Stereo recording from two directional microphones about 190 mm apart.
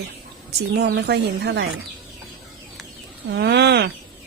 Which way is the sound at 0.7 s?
60° right (ahead or behind).